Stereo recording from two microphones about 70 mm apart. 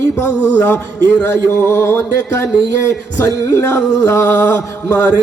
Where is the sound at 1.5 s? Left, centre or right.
Left.